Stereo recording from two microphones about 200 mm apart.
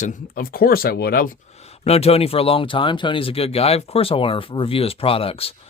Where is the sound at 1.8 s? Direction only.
30° left (ahead or behind).